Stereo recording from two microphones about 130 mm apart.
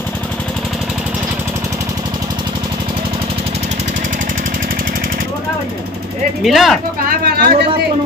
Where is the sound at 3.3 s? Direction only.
50° right (ahead or behind); by 5.3 s 90° right.